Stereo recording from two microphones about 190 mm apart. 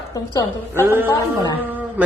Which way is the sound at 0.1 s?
20° left (ahead or behind).